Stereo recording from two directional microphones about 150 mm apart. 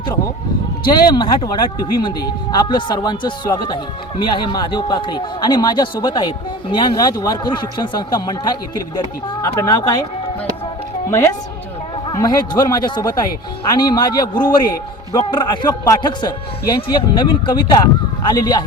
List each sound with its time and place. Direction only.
0.9 s speech: 30° left (ahead or behind)
12.0 s a man's voice: 25° left (ahead or behind)